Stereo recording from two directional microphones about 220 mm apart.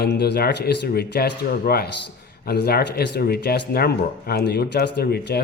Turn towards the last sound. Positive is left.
turn(degrees=45)  # may be behind; listen again after turning